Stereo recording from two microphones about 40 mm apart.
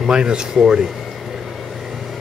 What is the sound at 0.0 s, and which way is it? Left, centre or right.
Speech, right.